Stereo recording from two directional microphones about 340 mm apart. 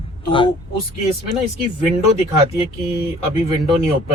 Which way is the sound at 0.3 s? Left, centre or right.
Centre.